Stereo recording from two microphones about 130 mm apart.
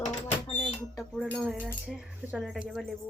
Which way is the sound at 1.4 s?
10° right (ahead or behind).